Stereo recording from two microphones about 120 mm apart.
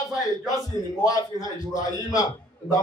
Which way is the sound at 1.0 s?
30° left (ahead or behind).